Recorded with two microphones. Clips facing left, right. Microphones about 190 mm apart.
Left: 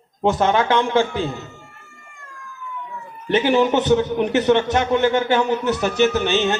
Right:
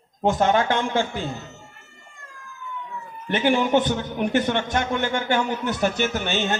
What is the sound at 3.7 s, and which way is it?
Music, 50° right (ahead or behind).